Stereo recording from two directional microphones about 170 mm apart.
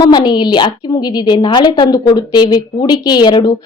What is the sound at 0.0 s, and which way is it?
A woman's voice, 25° left (ahead or behind).